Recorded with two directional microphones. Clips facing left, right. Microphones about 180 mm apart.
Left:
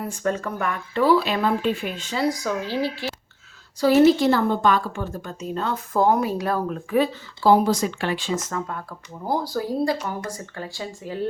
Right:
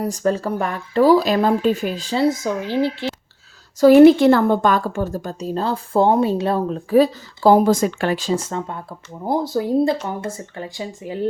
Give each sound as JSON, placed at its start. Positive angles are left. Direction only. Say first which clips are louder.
{"t": 0.0, "sound": "a woman's voice", "louder": "right 5 dB", "side_deg": -35}
{"t": 3.8, "sound": "a woman's voice", "louder": "right 7 dB", "side_deg": -50}